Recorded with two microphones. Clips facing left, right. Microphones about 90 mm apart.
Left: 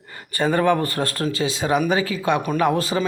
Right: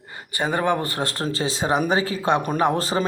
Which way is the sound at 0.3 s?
15° right (ahead or behind).